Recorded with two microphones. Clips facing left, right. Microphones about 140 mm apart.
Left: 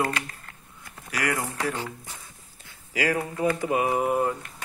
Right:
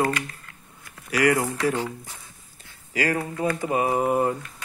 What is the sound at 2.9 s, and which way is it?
Speech, 10° left (ahead or behind).